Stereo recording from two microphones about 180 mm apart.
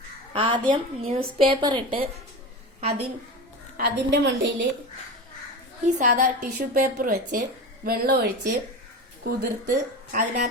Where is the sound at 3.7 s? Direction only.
65° right (ahead or behind); by 4.7 s 80° right.